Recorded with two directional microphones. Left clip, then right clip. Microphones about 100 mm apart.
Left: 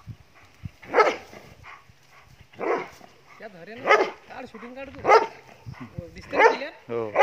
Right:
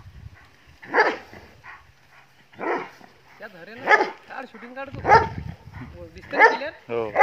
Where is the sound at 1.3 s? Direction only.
25° left (ahead or behind).